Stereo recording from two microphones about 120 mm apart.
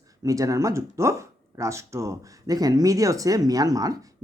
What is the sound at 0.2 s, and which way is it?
Speech, 30° right (ahead or behind).